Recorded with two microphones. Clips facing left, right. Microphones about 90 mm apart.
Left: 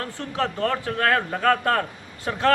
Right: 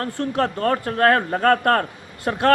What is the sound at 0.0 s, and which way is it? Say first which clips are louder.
A man's voice: right 5 dB; 45° right (ahead or behind).